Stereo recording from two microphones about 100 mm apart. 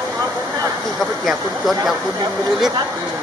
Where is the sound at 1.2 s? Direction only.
Centre (ahead or behind).